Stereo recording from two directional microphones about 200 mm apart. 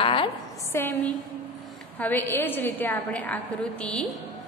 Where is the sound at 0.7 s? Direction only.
10° left (ahead or behind).